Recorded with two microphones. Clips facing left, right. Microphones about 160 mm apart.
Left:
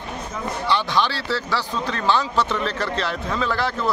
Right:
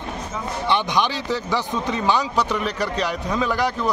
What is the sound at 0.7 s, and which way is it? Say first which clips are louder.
Speech: right 1 dB; 20° right (ahead or behind).